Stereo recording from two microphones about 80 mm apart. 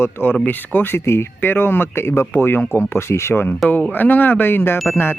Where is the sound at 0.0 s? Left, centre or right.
Left.